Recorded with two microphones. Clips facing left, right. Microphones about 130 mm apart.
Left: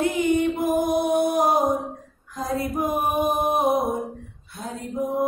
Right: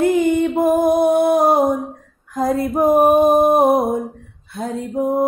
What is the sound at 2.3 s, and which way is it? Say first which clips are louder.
Mantra: right 8 dB; 55° right (ahead or behind).